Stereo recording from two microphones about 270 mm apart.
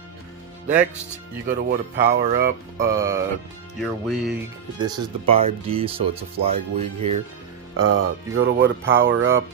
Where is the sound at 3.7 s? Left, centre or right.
Centre.